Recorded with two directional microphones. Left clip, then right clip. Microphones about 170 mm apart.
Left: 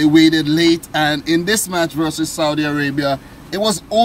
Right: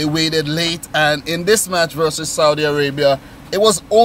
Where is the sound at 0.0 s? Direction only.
20° right (ahead or behind).